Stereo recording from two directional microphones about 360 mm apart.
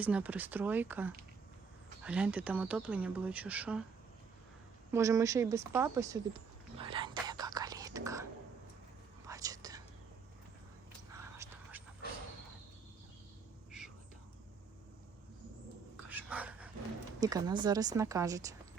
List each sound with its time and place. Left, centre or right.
0.0 s speech: centre
4.9 s a sound: centre
9.2 s whispering: centre
11.4 s a sound: centre
13.7 s whispering: centre
16.0 s dog: centre
17.2 s speech: centre